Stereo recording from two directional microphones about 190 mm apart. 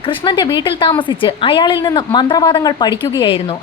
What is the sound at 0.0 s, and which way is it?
A woman's voice, 25° left (ahead or behind).